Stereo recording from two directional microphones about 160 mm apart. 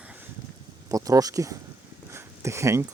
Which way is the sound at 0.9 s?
20° right (ahead or behind).